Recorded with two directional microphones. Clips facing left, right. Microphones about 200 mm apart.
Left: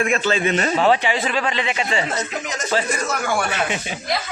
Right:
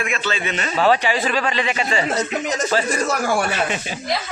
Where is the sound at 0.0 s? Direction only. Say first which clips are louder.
Left 5 dB; 40° left (ahead or behind).